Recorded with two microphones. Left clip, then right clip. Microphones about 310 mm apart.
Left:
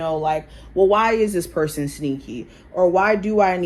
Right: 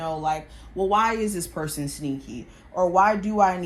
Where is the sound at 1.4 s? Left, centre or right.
Centre.